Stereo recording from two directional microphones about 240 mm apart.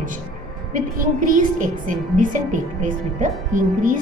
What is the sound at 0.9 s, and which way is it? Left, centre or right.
Speech, right.